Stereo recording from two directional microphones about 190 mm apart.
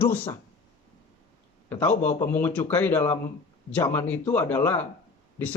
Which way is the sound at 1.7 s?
10° left (ahead or behind).